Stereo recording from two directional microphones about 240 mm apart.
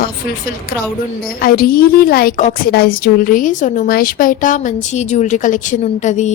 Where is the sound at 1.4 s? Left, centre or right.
Left.